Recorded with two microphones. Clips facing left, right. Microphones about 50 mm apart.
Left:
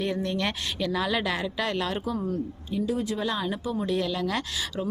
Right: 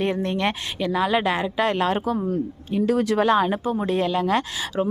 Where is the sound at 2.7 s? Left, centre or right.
Right.